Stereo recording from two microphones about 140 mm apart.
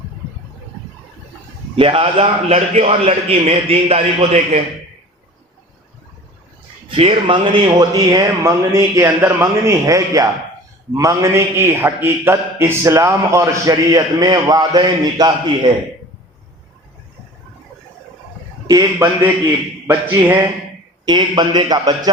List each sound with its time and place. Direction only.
1.7 s a man's voice: 40° right (ahead or behind)
6.8 s a man's voice: 40° right (ahead or behind)
18.7 s a man's voice: 25° right (ahead or behind)
21.0 s a man's voice: 30° right (ahead or behind)